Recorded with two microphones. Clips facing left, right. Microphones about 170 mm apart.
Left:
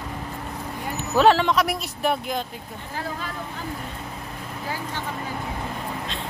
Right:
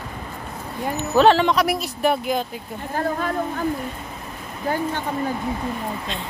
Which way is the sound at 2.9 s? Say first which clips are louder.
Right 8 dB; 50° right (ahead or behind).